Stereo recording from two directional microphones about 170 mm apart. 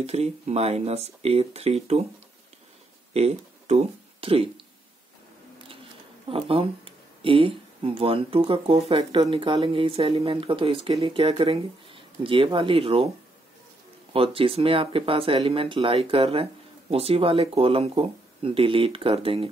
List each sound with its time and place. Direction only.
0.0 s speech: 40° right (ahead or behind)
3.1 s speech: 40° right (ahead or behind)
6.2 s speech: 35° right (ahead or behind)
14.1 s speech: 35° right (ahead or behind)